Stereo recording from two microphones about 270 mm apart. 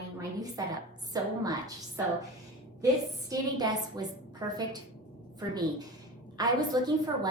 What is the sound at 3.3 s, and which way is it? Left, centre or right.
A woman's voice, centre.